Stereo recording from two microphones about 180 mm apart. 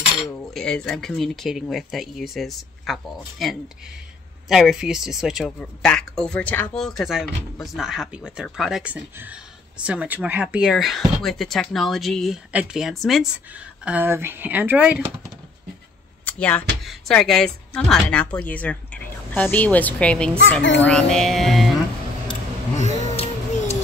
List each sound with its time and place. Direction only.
0.6 s speech: 5° left (ahead or behind)
13.8 s speech: 10° right (ahead or behind)
16.3 s speech: 10° left (ahead or behind)
20.6 s speech: 90° left
20.9 s speech: 5° left (ahead or behind)
22.8 s a sound: 40° left (ahead or behind)